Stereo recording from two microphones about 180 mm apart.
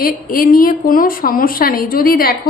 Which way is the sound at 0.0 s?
50° left (ahead or behind).